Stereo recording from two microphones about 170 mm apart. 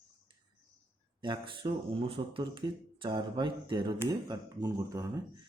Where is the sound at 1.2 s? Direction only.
30° right (ahead or behind).